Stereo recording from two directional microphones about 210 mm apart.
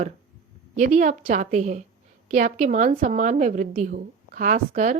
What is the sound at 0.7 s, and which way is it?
Speech, 35° right (ahead or behind).